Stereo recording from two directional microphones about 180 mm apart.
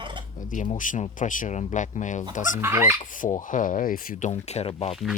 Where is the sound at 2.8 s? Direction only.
45° left (ahead or behind).